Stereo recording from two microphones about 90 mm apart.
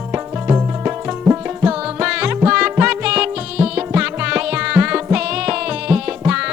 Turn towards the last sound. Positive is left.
turn(degrees=-10)  # may be behind; listen again after turning